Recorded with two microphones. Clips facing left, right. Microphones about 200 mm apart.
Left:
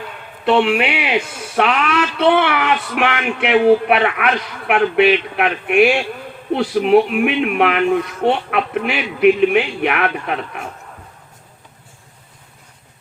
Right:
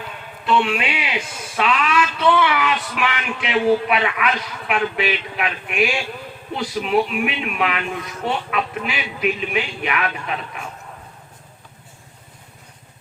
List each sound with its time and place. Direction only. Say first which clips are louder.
0.4 s speech: left 5 dB; 60° left (ahead or behind)